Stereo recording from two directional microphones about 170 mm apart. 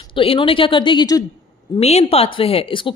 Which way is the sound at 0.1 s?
30° left (ahead or behind).